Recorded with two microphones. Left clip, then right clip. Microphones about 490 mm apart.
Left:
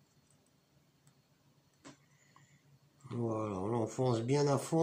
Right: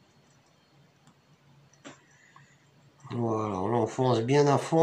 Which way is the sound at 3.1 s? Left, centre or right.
Right.